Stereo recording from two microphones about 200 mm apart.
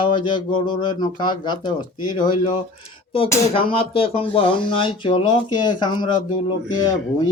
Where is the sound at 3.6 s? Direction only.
25° left (ahead or behind).